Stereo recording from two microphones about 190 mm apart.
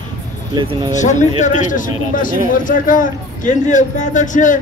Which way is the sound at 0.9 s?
40° left (ahead or behind).